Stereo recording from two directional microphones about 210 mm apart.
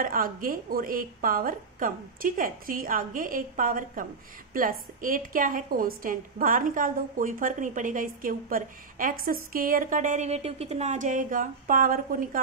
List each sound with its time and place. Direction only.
0.0 s a woman's voice: 40° right (ahead or behind)